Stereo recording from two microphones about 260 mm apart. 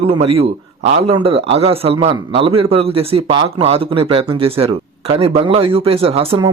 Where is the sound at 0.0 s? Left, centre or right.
Right.